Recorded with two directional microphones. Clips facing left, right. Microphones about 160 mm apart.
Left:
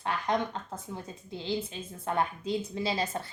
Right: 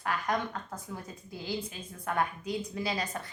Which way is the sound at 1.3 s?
25° left (ahead or behind).